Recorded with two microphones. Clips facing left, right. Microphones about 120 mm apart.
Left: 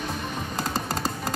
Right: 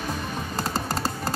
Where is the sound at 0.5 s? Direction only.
35° right (ahead or behind).